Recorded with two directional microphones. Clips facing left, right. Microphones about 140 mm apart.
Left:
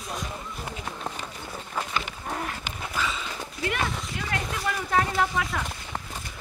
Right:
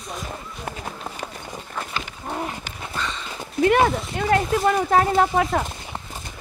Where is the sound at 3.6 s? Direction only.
50° right (ahead or behind).